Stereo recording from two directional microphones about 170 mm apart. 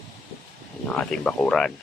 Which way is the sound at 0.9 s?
5° left (ahead or behind).